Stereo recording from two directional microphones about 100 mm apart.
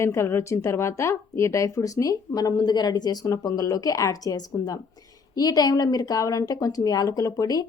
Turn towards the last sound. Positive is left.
turn(degrees=35)  # may be behind; listen again after turning